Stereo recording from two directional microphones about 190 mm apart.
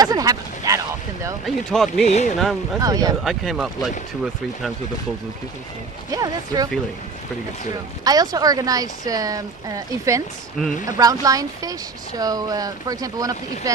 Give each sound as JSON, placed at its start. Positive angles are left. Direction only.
{"t": 0.0, "sound": "a sound", "side_deg": -20}
{"t": 1.4, "sound": "speech", "side_deg": 0}
{"t": 2.0, "sound": "speech", "side_deg": 35}
{"t": 2.8, "sound": "speech", "side_deg": -20}
{"t": 3.3, "sound": "speech", "side_deg": 0}
{"t": 6.1, "sound": "speech", "side_deg": -20}
{"t": 8.0, "sound": "speech", "side_deg": -20}